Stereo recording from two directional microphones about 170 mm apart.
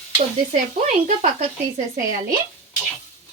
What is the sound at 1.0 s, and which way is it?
Speech, 45° right (ahead or behind).